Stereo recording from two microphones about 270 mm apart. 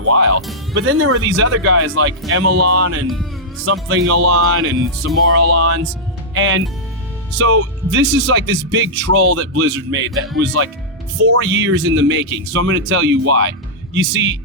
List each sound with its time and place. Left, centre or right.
0.1 s speech: right